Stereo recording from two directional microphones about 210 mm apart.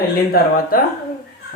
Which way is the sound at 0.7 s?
45° left (ahead or behind).